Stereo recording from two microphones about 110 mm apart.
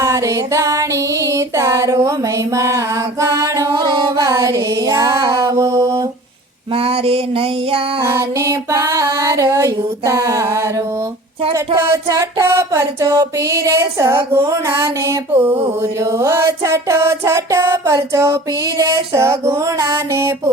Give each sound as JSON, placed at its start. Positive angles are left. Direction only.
{"t": 0.0, "sound": "music", "side_deg": -30}
{"t": 3.7, "sound": "female singing", "side_deg": -40}
{"t": 6.7, "sound": "music", "side_deg": -60}
{"t": 8.0, "sound": "mantra", "side_deg": -25}
{"t": 14.4, "sound": "a sound", "side_deg": -40}
{"t": 14.8, "sound": "mantra", "side_deg": -30}
{"t": 15.3, "sound": "mantra", "side_deg": -15}